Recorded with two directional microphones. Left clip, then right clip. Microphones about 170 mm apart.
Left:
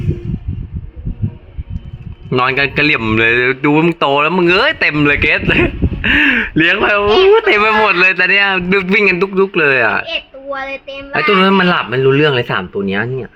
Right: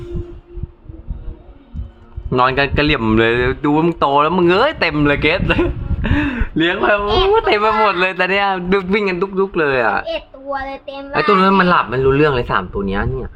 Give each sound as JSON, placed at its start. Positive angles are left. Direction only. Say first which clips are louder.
{"t": 2.3, "sound": "a woman's voice", "louder": "left 1 dB", "side_deg": 10}
{"t": 3.0, "sound": "a man's voice", "louder": "left 2 dB", "side_deg": -5}
{"t": 3.3, "sound": "speech", "louder": "left 4 dB", "side_deg": 10}
{"t": 4.9, "sound": "a woman's voice", "louder": "left 3 dB", "side_deg": 15}
{"t": 6.3, "sound": "speech", "louder": "left 6 dB", "side_deg": 25}
{"t": 7.3, "sound": "speech", "louder": "left 3 dB", "side_deg": 35}
{"t": 7.6, "sound": "a woman's voice", "louder": "left 4 dB", "side_deg": 20}
{"t": 8.1, "sound": "speech", "louder": "left 5 dB", "side_deg": 0}
{"t": 8.9, "sound": "a woman's voice", "louder": "left 6 dB", "side_deg": 20}